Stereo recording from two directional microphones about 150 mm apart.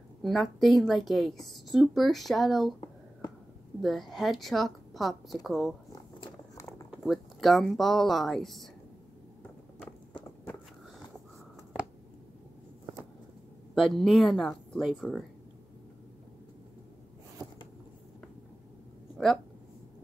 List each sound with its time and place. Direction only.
0.2 s a woman's voice: centre (ahead or behind)
3.8 s a woman's voice: centre (ahead or behind)
6.2 s a sound: 20° left (ahead or behind)
6.9 s a woman's voice: centre (ahead or behind)
13.7 s a woman's voice: centre (ahead or behind)
19.1 s a sound: centre (ahead or behind)